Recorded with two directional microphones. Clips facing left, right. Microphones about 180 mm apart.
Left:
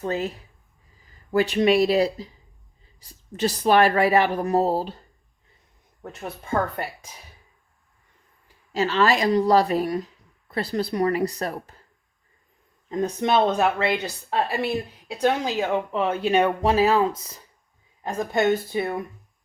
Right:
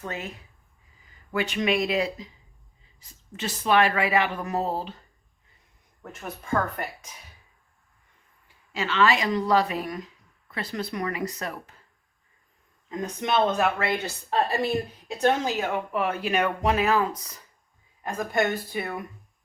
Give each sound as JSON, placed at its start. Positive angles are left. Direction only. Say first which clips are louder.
{"t": 0.0, "sound": "speech", "louder": "left 8 dB", "side_deg": 35}
{"t": 1.3, "sound": "speech", "louder": "left 6 dB", "side_deg": 35}
{"t": 8.7, "sound": "speech", "louder": "left 3 dB", "side_deg": 40}
{"t": 13.0, "sound": "speech", "louder": "left 4 dB", "side_deg": 30}
{"t": 14.3, "sound": "speech", "louder": "even", "side_deg": 10}